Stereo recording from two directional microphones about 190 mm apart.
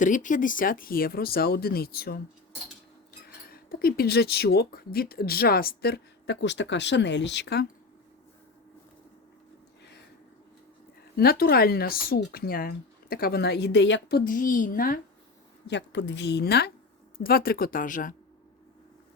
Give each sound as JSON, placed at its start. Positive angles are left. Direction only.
{"t": 0.0, "sound": "speech", "side_deg": 40}
{"t": 11.2, "sound": "speech", "side_deg": 55}
{"t": 15.6, "sound": "speech", "side_deg": 65}